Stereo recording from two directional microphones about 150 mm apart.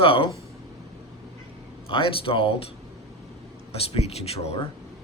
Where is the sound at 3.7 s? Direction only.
45° left (ahead or behind).